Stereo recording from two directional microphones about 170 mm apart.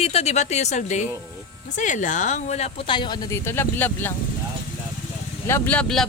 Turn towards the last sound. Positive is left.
turn(degrees=5)  # may be behind; listen again after turning